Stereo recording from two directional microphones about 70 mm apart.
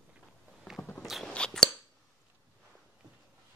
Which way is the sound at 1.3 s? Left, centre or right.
Centre.